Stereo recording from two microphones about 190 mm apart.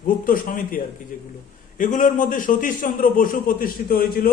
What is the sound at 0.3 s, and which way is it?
A man's voice, 45° left (ahead or behind).